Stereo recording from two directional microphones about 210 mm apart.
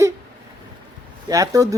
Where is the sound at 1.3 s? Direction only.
15° right (ahead or behind).